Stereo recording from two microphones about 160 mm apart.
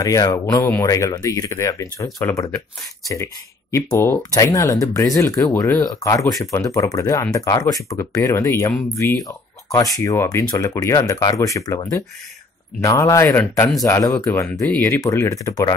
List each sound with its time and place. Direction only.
0.0 s speech: 20° left (ahead or behind)
3.7 s speech: 15° left (ahead or behind)